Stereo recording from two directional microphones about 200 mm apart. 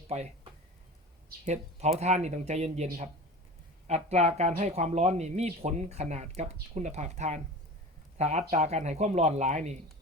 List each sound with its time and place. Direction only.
1.5 s speech: 35° right (ahead or behind)